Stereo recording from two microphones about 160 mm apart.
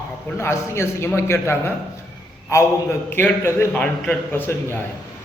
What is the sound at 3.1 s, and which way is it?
A man's voice, 15° left (ahead or behind).